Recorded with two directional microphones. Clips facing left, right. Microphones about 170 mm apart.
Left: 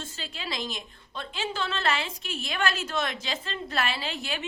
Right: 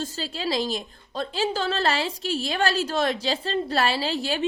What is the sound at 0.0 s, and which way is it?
A woman's voice, 35° right (ahead or behind).